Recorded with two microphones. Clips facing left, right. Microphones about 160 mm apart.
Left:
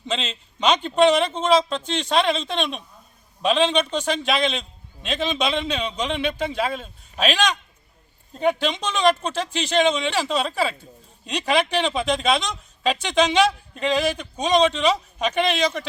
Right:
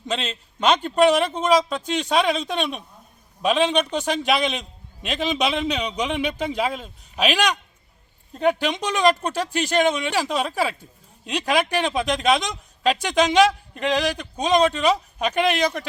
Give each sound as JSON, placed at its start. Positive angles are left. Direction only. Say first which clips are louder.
{"t": 0.0, "sound": "a man's voice", "louder": "right 1 dB", "side_deg": -10}